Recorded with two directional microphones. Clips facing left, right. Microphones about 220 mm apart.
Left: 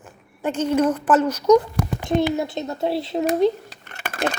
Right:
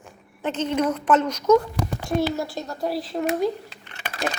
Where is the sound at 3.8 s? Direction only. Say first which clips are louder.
Left 4 dB; 50° left (ahead or behind).